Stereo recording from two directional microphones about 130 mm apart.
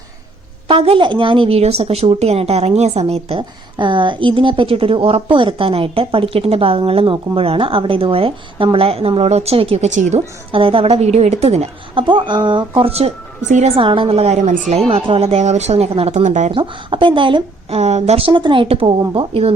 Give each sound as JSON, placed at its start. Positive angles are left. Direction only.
{"t": 0.7, "sound": "speech", "side_deg": -45}
{"t": 12.0, "sound": "speech", "side_deg": -40}
{"t": 13.7, "sound": "speech", "side_deg": -40}
{"t": 16.5, "sound": "speech", "side_deg": -40}